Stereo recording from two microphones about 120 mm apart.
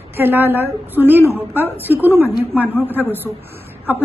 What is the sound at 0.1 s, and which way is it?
A woman's voice, 15° right (ahead or behind).